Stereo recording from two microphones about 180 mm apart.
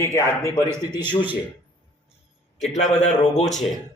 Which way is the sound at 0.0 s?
15° left (ahead or behind).